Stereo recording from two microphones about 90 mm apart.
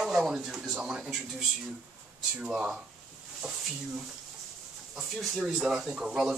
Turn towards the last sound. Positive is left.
turn(degrees=-5)  # may be behind; listen again after turning